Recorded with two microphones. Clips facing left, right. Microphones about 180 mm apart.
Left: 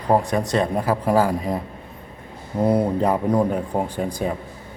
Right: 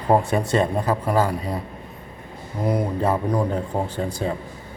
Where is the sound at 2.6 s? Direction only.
30° left (ahead or behind).